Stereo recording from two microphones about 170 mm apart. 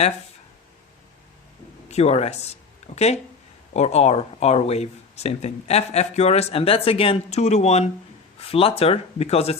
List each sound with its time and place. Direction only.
1.9 s speech: 40° left (ahead or behind)